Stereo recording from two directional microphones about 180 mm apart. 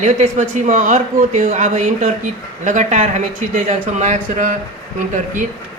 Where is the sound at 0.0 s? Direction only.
45° right (ahead or behind).